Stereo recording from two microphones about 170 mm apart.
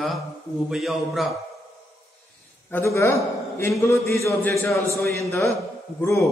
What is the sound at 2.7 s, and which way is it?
A man's voice, 15° left (ahead or behind).